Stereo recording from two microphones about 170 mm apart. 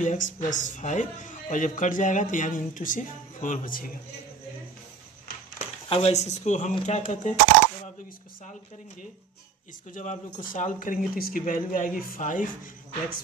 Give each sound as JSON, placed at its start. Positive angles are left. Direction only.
{"t": 0.0, "sound": "a man's voice", "side_deg": 50}
{"t": 5.3, "sound": "a sound", "side_deg": 65}
{"t": 5.9, "sound": "a man's voice", "side_deg": 35}
{"t": 9.9, "sound": "a man's voice", "side_deg": 45}